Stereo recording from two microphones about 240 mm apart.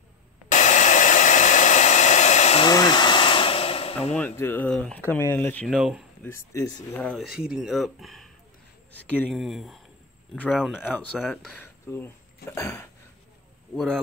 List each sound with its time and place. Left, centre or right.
0.5 s hair dryer: left
4.1 s speech: centre
6.2 s speech: centre